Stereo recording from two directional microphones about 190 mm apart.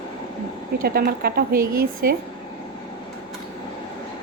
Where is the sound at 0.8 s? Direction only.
50° right (ahead or behind).